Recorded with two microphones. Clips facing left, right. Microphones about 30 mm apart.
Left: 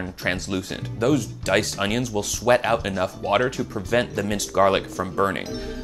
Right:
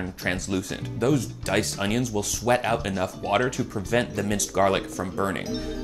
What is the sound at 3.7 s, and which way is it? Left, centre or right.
Speech, left.